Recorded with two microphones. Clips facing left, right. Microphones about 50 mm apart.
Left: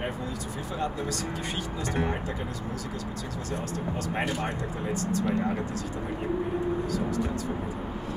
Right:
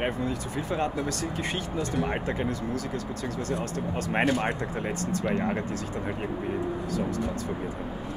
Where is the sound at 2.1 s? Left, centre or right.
Right.